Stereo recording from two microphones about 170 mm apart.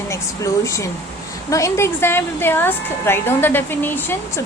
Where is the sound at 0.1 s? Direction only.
15° left (ahead or behind).